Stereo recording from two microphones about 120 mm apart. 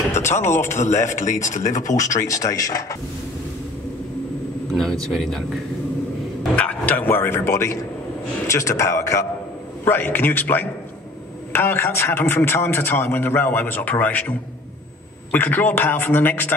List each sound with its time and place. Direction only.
0.2 s a man's voice: 20° left (ahead or behind)
0.9 s speech: 90° left
2.0 s speech: 25° left (ahead or behind)
5.1 s speech: centre (ahead or behind)
6.5 s a man's voice: 15° left (ahead or behind)
15.3 s a man's voice: 15° left (ahead or behind)